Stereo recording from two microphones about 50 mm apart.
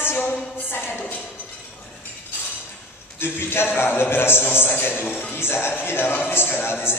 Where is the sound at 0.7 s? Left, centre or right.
Left.